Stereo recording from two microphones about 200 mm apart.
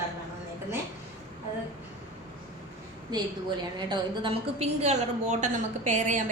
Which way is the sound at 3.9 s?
25° right (ahead or behind).